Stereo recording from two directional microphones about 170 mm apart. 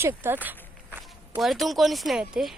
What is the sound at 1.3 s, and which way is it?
Speech, centre (ahead or behind).